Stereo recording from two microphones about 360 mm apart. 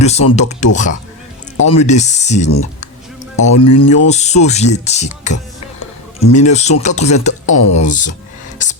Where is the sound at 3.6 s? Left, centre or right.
Centre.